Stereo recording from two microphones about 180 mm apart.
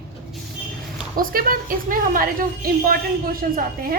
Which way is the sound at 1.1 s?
55° right (ahead or behind).